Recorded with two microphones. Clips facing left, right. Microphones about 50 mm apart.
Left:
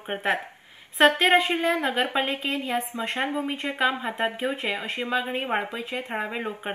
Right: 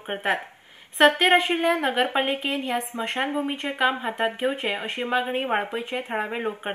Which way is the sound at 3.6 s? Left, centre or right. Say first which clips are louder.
Right 1 dB; right.